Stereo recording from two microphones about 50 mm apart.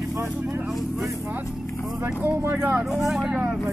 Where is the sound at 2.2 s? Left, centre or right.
Right.